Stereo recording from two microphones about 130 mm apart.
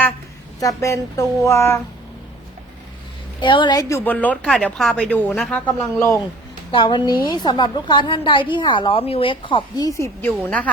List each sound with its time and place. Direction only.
0.6 s a woman's voice: 25° left (ahead or behind)
3.4 s a woman's voice: 35° left (ahead or behind)
4.0 s speech: 10° left (ahead or behind)
6.7 s a woman's voice: 40° left (ahead or behind)
10.0 s a woman's voice: 20° left (ahead or behind)